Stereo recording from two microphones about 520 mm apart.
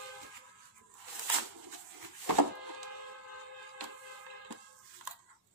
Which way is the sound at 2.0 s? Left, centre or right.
Right.